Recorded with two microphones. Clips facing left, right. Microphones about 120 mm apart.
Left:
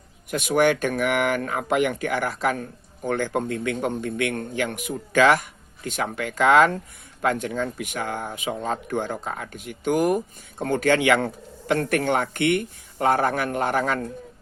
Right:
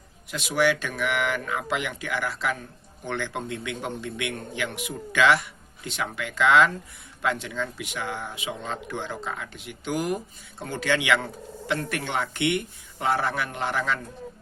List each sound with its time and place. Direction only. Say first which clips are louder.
0.3 s speech: left 4 dB; 50° left (ahead or behind)